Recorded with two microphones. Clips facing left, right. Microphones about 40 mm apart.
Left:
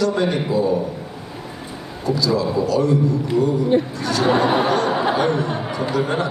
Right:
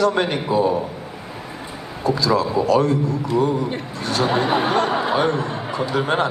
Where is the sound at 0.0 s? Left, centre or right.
Right.